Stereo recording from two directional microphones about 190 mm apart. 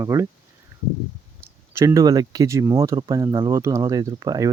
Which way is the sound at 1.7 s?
15° right (ahead or behind).